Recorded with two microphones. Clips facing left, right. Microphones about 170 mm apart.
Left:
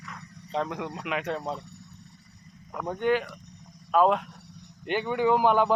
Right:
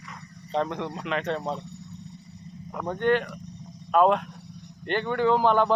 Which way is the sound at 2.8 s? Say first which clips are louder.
Right 2 dB; 5° left (ahead or behind).